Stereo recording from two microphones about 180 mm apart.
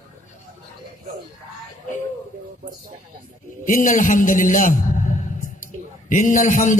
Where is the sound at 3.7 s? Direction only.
45° left (ahead or behind).